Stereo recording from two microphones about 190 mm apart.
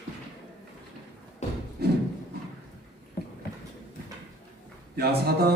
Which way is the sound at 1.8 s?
55° right (ahead or behind).